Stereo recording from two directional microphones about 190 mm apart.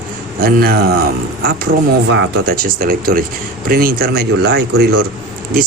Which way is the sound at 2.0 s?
70° right (ahead or behind).